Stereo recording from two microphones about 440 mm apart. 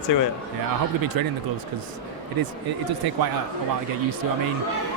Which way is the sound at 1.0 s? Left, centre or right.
Right.